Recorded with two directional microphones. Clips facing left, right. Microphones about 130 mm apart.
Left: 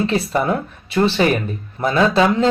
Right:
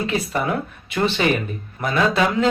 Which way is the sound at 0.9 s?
30° left (ahead or behind).